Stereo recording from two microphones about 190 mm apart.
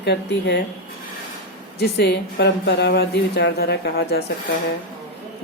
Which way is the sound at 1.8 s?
60° left (ahead or behind).